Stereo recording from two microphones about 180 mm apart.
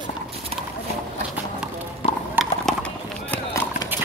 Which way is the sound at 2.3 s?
Centre (ahead or behind).